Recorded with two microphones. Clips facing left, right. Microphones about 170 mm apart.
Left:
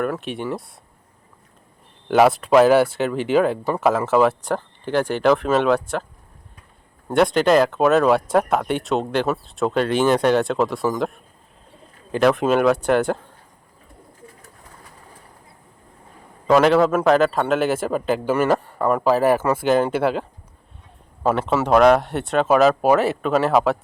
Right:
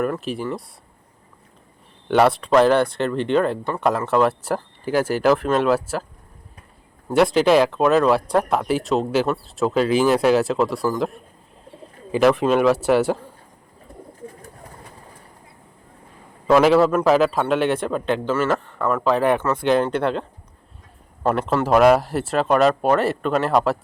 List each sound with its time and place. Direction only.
0.0 s speech: centre (ahead or behind)
2.0 s speech: 5° left (ahead or behind)
7.1 s speech: centre (ahead or behind)
16.5 s speech: centre (ahead or behind)
21.2 s speech: centre (ahead or behind)